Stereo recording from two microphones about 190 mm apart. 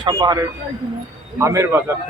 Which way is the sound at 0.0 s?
20° right (ahead or behind).